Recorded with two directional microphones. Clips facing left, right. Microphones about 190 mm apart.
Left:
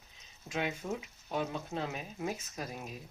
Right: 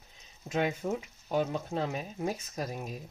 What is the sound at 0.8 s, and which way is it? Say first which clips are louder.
Speech: right 5 dB; 60° right (ahead or behind).